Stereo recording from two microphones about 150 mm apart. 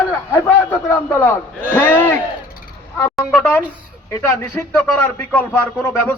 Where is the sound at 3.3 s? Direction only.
10° left (ahead or behind).